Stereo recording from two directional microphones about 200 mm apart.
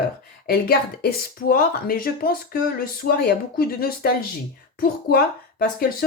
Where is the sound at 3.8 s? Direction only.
50° left (ahead or behind).